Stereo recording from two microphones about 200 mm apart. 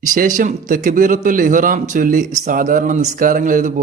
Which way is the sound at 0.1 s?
40° right (ahead or behind).